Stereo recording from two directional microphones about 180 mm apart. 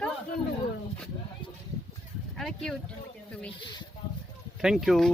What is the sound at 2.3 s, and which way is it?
Speech, centre (ahead or behind).